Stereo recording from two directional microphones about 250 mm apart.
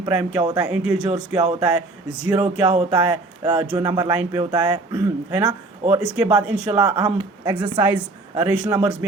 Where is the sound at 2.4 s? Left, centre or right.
Right.